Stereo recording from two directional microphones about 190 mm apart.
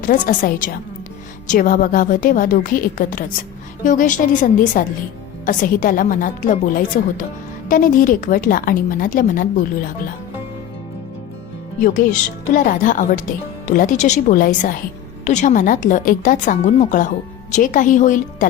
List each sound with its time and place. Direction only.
0.0 s a woman's voice: 45° left (ahead or behind)
12.5 s a woman's voice: 45° left (ahead or behind)